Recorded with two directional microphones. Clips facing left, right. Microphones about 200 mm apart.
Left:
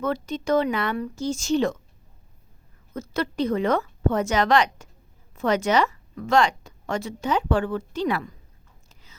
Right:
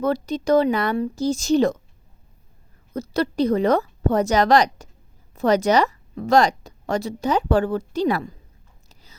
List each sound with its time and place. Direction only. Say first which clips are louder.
0.0 s a woman's voice: right 4 dB; 35° right (ahead or behind)
2.9 s a woman's voice: right 5 dB; 35° right (ahead or behind)
8.9 s whispering: right 4 dB; 35° right (ahead or behind)